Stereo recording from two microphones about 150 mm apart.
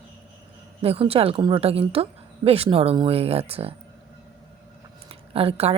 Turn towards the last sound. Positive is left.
turn(degrees=-40)  # may be behind; listen again after turning